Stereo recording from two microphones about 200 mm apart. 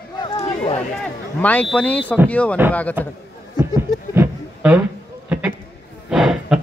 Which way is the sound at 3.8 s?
10° right (ahead or behind).